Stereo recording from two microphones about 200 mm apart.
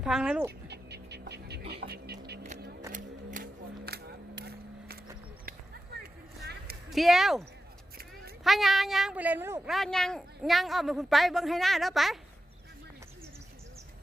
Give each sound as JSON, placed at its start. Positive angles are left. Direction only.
{"t": 0.0, "sound": "speech", "side_deg": -5}
{"t": 0.7, "sound": "music", "side_deg": -55}
{"t": 1.9, "sound": "a sound", "side_deg": -55}
{"t": 2.9, "sound": "a sound", "side_deg": -45}
{"t": 6.9, "sound": "speech", "side_deg": 0}
{"t": 8.4, "sound": "speech", "side_deg": 0}
{"t": 9.7, "sound": "speech", "side_deg": 0}